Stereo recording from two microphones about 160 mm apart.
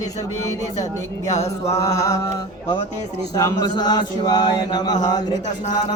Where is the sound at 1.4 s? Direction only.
20° left (ahead or behind).